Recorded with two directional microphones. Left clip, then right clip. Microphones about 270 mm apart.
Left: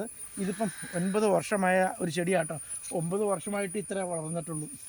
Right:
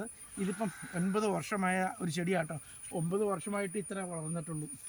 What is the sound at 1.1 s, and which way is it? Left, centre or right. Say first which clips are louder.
Speech: left 7 dB; centre.